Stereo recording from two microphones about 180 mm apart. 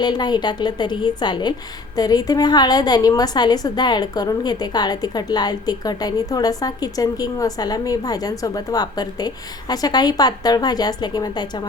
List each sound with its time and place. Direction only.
0.0 s a woman's voice: 25° left (ahead or behind)